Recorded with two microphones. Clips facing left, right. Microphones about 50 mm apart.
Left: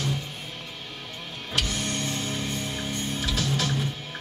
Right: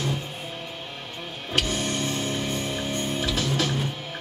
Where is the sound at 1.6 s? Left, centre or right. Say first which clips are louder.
Right 3 dB; right.